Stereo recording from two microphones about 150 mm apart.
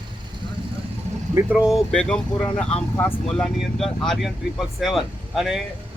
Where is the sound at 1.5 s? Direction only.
5° right (ahead or behind).